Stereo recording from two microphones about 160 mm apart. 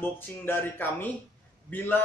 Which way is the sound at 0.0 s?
10° left (ahead or behind).